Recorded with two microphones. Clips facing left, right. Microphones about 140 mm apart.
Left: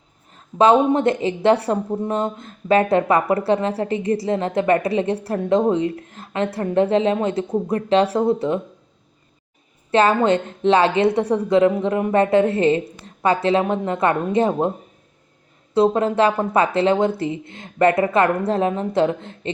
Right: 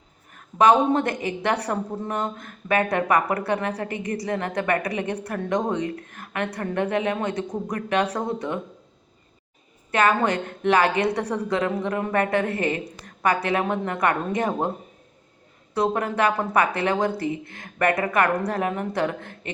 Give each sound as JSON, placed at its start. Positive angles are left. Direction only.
{"t": 0.3, "sound": "a woman's voice", "side_deg": 25}
{"t": 9.9, "sound": "a woman's voice", "side_deg": 30}
{"t": 15.7, "sound": "a woman's voice", "side_deg": 25}